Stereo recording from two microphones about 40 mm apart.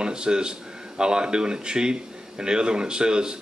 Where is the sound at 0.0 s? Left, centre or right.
Right.